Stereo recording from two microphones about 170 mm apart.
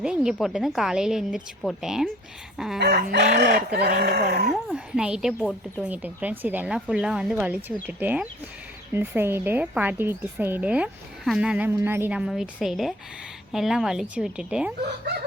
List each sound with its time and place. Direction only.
0.0 s a woman's voice: 5° right (ahead or behind)
2.7 s speech: 70° right (ahead or behind)
4.7 s a woman's voice: 5° right (ahead or behind)
5.8 s a woman's voice: 10° right (ahead or behind)